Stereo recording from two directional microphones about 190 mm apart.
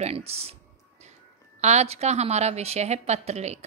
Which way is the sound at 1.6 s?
35° right (ahead or behind).